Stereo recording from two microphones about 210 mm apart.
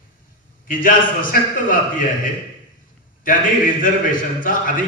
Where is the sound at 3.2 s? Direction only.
40° left (ahead or behind).